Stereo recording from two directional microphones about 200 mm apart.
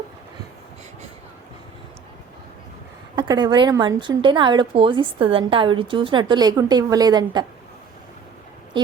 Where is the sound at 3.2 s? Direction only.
20° right (ahead or behind).